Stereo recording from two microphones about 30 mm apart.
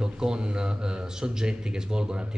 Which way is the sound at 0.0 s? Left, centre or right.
Right.